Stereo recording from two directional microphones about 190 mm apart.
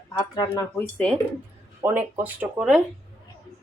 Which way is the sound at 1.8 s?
10° right (ahead or behind).